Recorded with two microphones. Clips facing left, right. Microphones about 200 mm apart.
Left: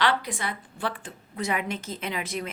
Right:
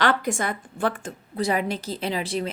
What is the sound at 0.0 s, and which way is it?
Speech, 45° right (ahead or behind).